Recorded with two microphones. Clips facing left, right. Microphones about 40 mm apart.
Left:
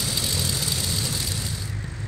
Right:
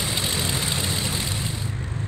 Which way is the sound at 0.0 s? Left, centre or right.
Right.